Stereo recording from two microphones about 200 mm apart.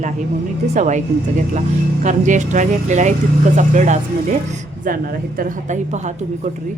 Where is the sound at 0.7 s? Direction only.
35° right (ahead or behind).